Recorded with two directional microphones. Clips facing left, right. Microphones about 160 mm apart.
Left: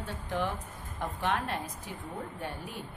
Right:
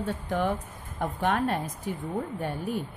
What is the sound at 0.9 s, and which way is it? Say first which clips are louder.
Speech: right 5 dB; 50° right (ahead or behind).